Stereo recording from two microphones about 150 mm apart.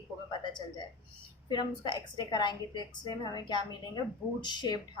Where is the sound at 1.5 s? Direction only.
30° left (ahead or behind).